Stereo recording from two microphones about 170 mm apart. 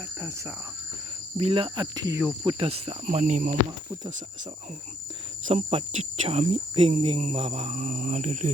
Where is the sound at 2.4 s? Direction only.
30° right (ahead or behind); by 3.6 s 50° right (ahead or behind).